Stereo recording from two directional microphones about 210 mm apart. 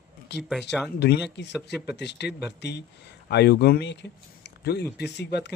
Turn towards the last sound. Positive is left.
turn(degrees=55)  # may be behind; listen again after turning